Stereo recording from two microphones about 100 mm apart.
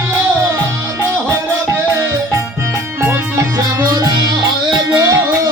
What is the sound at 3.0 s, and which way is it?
Music, 25° right (ahead or behind).